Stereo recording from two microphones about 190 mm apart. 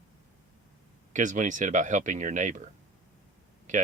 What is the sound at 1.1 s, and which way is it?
Speech, 40° right (ahead or behind).